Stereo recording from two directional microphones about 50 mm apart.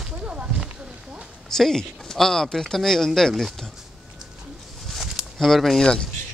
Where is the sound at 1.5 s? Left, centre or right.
Centre.